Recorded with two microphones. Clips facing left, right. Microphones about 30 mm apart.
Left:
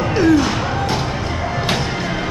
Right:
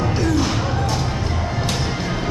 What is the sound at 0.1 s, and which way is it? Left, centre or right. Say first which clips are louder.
Music: left 6 dB; centre.